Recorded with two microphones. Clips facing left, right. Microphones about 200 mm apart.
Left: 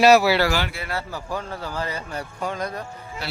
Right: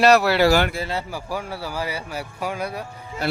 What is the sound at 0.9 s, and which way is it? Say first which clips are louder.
Speech: right 1 dB; 15° right (ahead or behind).